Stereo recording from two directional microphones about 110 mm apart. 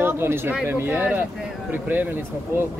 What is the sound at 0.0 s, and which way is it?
Speech, 20° right (ahead or behind).